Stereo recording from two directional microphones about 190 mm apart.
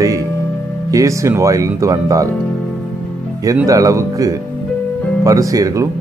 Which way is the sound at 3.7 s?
15° right (ahead or behind).